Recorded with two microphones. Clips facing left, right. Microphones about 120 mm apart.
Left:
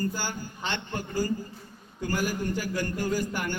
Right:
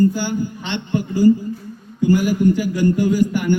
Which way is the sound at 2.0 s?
15° right (ahead or behind).